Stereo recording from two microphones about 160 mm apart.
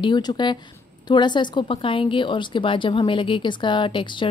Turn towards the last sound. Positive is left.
turn(degrees=30)  # may be behind; listen again after turning